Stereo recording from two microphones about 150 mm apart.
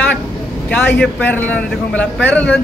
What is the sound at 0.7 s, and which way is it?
A man's voice, 10° left (ahead or behind).